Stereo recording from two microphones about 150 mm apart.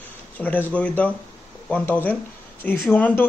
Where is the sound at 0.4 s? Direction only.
10° left (ahead or behind).